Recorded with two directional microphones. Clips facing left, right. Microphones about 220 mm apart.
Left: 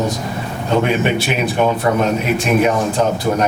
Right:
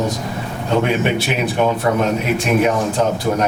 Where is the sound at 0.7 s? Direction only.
15° left (ahead or behind).